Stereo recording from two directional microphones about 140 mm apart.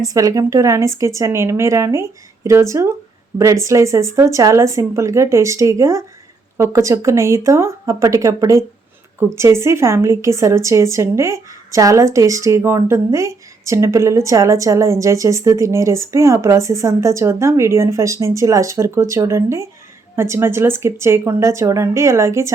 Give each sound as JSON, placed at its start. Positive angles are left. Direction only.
{"t": 0.0, "sound": "a woman's voice", "side_deg": -25}